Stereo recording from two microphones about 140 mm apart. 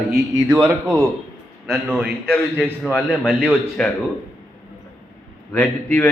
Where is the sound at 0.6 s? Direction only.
20° right (ahead or behind).